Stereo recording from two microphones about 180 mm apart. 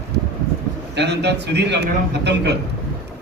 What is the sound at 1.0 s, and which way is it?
A man's voice, 70° right (ahead or behind).